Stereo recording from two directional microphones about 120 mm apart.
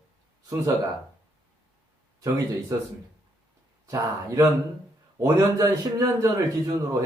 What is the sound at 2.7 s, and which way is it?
A man's voice, 30° right (ahead or behind).